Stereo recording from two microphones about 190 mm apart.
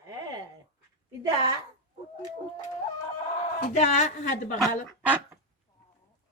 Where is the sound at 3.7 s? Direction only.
40° left (ahead or behind).